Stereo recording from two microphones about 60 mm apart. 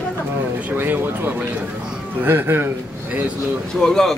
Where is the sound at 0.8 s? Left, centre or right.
Right.